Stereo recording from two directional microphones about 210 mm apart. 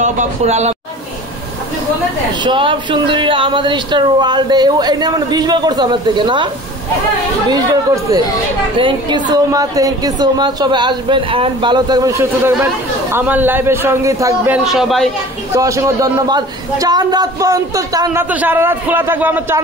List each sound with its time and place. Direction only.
0.0 s speech: 35° right (ahead or behind)
2.3 s speech: 25° right (ahead or behind)
7.5 s a woman's voice: 15° right (ahead or behind); by 15.0 s centre (ahead or behind)
15.5 s a woman's voice: 15° right (ahead or behind)